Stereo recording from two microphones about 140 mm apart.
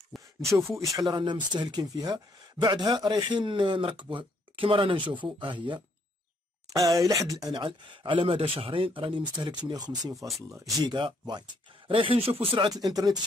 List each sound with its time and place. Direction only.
0.1 s a sound: centre (ahead or behind)
0.6 s speech: 20° right (ahead or behind)
0.9 s speech: 30° right (ahead or behind)
7.0 s speech: 25° right (ahead or behind)
12.8 s speech: 30° right (ahead or behind)